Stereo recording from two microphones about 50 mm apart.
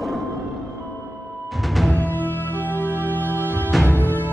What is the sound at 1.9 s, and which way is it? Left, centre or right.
Music, left.